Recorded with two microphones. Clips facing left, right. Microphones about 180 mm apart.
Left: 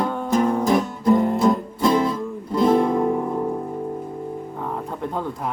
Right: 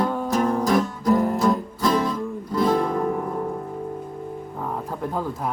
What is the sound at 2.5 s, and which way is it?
Music, 25° left (ahead or behind).